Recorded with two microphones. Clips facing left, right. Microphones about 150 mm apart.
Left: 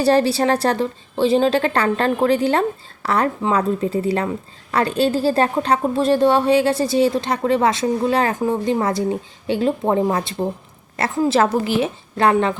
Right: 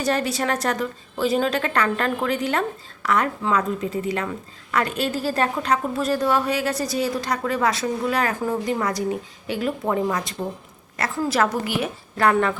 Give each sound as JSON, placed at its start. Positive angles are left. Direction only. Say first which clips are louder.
{"t": 0.0, "sound": "a woman's voice", "louder": "left 7 dB", "side_deg": 30}